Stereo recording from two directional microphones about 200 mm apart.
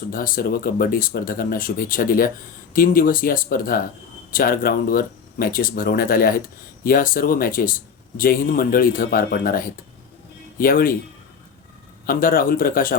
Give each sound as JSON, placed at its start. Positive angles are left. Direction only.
{"t": 0.1, "sound": "speech", "side_deg": 45}
{"t": 12.0, "sound": "speech", "side_deg": 45}